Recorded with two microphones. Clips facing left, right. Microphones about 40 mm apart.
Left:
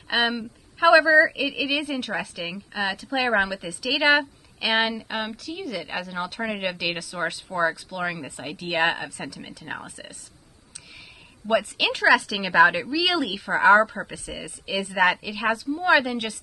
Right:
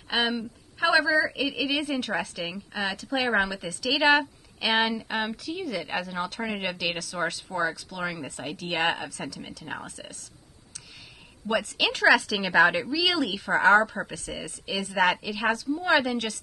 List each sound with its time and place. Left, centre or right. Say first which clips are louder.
0.1 s a woman's voice: left 3 dB; centre
11.5 s a woman's voice: left 5 dB; left
11.8 s a woman's voice: even; centre